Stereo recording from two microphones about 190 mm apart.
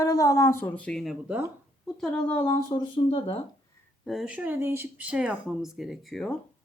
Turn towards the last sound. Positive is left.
turn(degrees=0)  # may be behind; listen again after turning